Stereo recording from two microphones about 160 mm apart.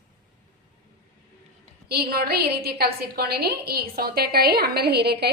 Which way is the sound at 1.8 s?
80° right.